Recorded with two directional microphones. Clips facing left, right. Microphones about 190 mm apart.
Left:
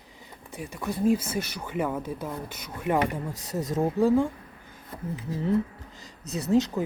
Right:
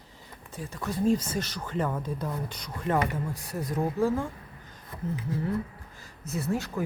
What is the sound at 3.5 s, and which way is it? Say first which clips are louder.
Speech: left 4 dB; 20° left (ahead or behind).